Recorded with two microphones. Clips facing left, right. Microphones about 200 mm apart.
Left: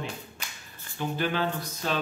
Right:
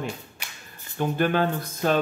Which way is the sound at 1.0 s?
50° right (ahead or behind).